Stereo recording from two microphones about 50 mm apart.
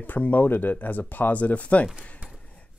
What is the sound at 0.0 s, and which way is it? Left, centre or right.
Speech, left.